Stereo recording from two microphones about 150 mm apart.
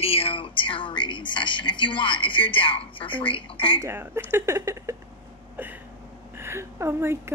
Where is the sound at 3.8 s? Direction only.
15° right (ahead or behind).